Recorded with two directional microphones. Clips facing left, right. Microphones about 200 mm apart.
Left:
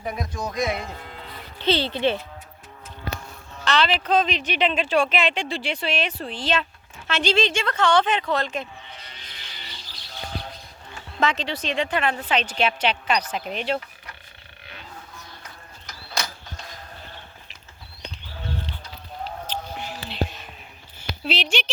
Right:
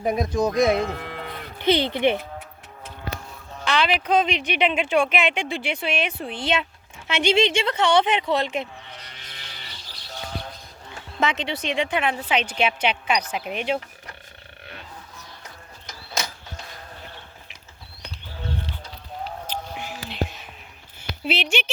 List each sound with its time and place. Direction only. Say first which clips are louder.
0.4 s speech: right 6 dB; 45° right (ahead or behind)
0.8 s speech: right 8 dB; 75° right (ahead or behind)
1.5 s speech: right 2 dB; 15° right (ahead or behind)
3.6 s speech: even; 10° right (ahead or behind)
11.2 s speech: even; 10° right (ahead or behind)
19.5 s music: even; 10° right (ahead or behind)
21.2 s speech: right 1 dB; 5° right (ahead or behind)